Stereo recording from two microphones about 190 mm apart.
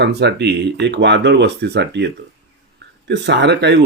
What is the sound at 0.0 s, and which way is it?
Speech, 60° right (ahead or behind).